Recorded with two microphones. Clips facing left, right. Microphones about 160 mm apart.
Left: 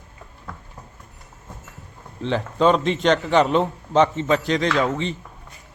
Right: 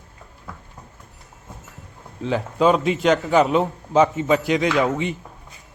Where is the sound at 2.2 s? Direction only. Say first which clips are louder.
Even; 5° right (ahead or behind).